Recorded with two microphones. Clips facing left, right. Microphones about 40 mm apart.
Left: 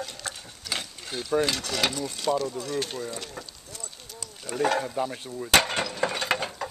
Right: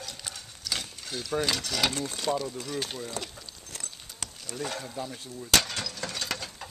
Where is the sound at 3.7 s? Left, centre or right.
Right.